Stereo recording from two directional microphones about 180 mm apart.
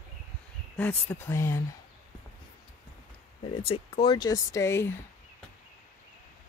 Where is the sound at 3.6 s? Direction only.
30° left (ahead or behind); by 4.9 s 15° left (ahead or behind).